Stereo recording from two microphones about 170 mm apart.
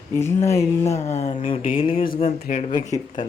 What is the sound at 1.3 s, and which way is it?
Speech, 30° left (ahead or behind).